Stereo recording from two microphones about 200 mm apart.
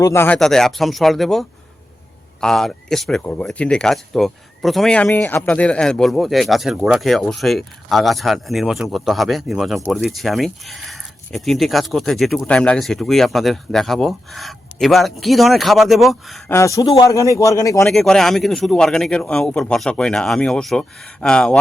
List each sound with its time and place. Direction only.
0.0 s a man's voice: 15° left (ahead or behind)
0.3 s speech: centre (ahead or behind)
16.5 s a man's voice: 15° left (ahead or behind)
17.8 s speech: centre (ahead or behind)